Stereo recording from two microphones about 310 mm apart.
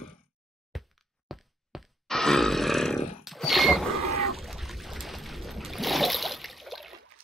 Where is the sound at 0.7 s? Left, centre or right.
Centre.